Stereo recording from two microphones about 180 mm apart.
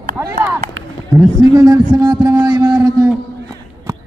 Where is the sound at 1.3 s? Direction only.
20° right (ahead or behind).